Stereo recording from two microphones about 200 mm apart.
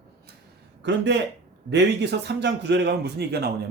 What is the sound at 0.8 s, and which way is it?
Speech, 60° right (ahead or behind).